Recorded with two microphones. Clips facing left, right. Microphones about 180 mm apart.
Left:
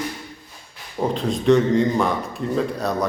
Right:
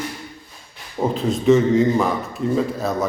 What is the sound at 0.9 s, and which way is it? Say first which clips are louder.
A man's voice: right 2 dB; 5° right (ahead or behind).